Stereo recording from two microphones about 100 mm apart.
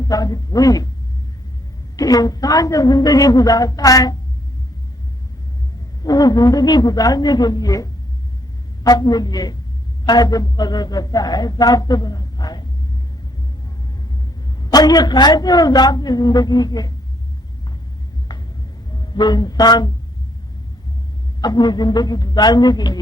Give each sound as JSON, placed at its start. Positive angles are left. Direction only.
{"t": 0.0, "sound": "speech", "side_deg": 40}
{"t": 2.0, "sound": "speech", "side_deg": 40}
{"t": 6.0, "sound": "speech", "side_deg": 40}
{"t": 14.6, "sound": "a man's voice", "side_deg": 40}
{"t": 18.9, "sound": "music", "side_deg": 45}
{"t": 21.4, "sound": "a man's voice", "side_deg": 45}